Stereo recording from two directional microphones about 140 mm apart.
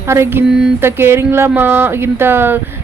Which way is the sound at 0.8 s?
15° right (ahead or behind).